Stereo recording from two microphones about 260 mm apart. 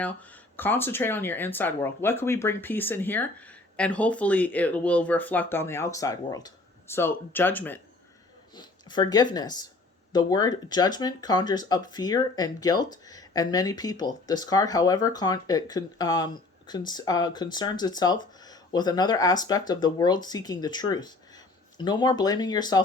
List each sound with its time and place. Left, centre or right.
0.0 s speech: centre